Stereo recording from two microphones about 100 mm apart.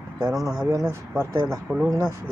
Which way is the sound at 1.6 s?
10° right (ahead or behind).